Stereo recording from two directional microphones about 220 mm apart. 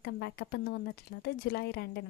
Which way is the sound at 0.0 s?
45° left (ahead or behind).